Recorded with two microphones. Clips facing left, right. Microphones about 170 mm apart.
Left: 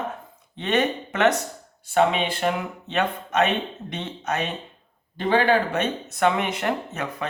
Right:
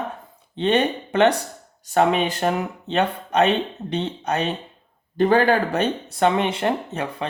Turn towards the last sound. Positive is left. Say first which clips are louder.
# right 3 dB
turn(degrees=-30)  # may be behind; listen again after turning